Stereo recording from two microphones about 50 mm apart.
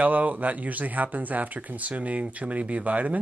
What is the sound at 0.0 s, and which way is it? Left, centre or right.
Speech, right.